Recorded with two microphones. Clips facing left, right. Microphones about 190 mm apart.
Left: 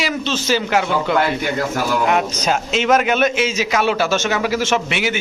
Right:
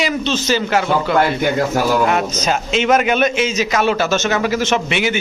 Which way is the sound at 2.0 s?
5° left (ahead or behind).